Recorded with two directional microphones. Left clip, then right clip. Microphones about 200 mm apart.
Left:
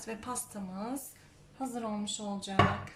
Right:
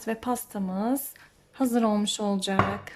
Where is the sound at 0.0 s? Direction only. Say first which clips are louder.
Right 10 dB; 40° right (ahead or behind).